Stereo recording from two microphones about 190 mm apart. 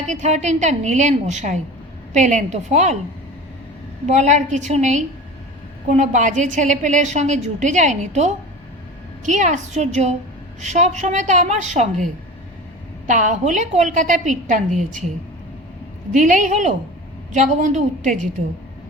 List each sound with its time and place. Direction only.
0.1 s a woman's voice: 40° right (ahead or behind)
4.0 s a woman's voice: 40° right (ahead or behind)
13.1 s a woman's voice: 40° right (ahead or behind)
16.1 s a woman's voice: 40° right (ahead or behind)